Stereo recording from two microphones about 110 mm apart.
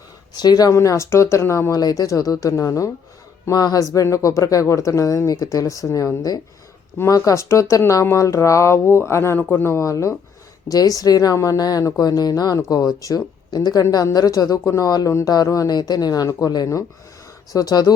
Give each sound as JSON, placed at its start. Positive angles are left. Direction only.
{"t": 0.3, "sound": "speech", "side_deg": 35}